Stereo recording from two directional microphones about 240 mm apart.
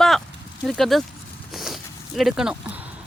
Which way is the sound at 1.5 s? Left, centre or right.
Centre.